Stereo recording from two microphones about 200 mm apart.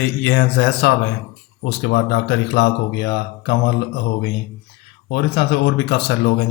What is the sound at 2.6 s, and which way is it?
Speech, 55° left (ahead or behind).